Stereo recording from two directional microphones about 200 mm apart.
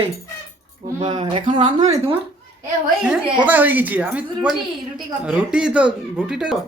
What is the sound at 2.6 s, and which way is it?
A woman's voice, 5° right (ahead or behind).